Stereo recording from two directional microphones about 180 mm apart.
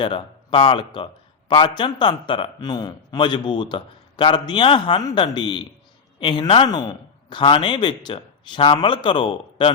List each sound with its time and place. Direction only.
0.0 s a man's voice: 30° left (ahead or behind)